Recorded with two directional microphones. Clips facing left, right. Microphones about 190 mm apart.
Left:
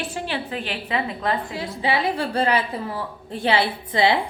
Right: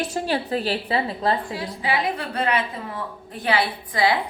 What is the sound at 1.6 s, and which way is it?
A woman's voice, 25° left (ahead or behind).